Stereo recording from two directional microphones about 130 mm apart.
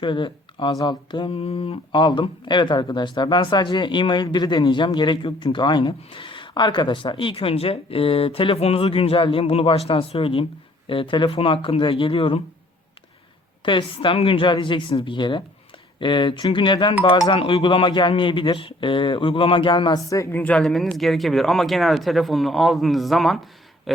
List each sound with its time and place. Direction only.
0.0 s speech: 40° left (ahead or behind)
13.7 s speech: 40° left (ahead or behind)
20.3 s speech: 10° left (ahead or behind)